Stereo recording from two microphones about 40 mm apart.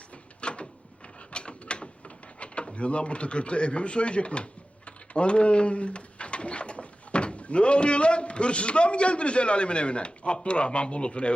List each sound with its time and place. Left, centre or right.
0.4 s drawer open or close: left
1.3 s a sound: left
4.9 s speech: left